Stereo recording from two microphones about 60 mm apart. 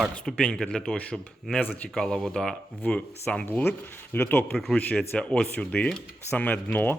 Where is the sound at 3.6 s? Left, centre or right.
Left; by 5.5 s centre.